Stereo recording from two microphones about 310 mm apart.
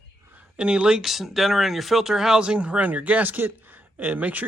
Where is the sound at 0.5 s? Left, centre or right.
Centre.